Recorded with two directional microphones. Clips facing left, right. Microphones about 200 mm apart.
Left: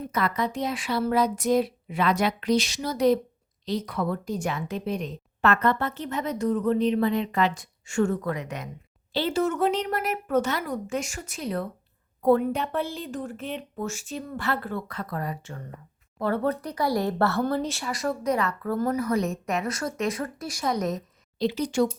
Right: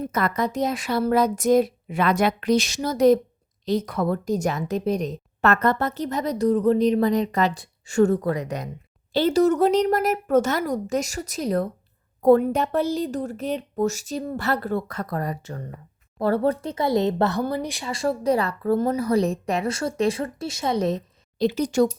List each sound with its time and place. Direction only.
0.0 s a woman's voice: 45° right (ahead or behind); by 17.9 s 15° right (ahead or behind)
17.9 s a woman's voice: 30° right (ahead or behind)
21.3 s speech: 45° right (ahead or behind)